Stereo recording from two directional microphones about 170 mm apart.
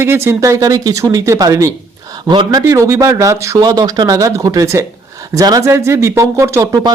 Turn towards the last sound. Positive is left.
turn(degrees=-20)  # may be behind; listen again after turning